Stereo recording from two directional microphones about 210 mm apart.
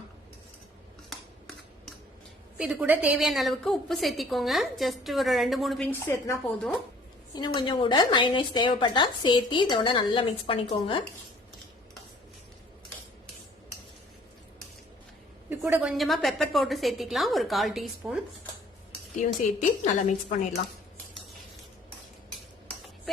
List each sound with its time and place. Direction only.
2.6 s a woman's voice: 5° right (ahead or behind)
7.3 s a woman's voice: 20° left (ahead or behind)
15.4 s a woman's voice: 10° right (ahead or behind)
19.5 s a woman's voice: 35° left (ahead or behind)